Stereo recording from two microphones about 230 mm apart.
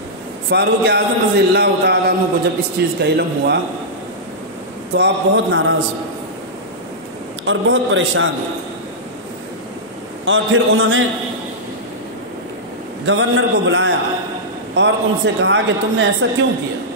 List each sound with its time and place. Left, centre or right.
0.5 s a man's voice: right
4.9 s a man's voice: right
7.4 s a man's voice: right
10.2 s a man's voice: right
13.0 s a man's voice: right